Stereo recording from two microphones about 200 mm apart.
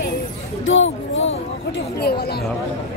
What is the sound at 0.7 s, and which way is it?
Speech, 70° left (ahead or behind).